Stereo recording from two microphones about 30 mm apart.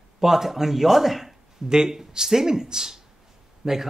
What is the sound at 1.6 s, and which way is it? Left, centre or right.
A man's voice, right.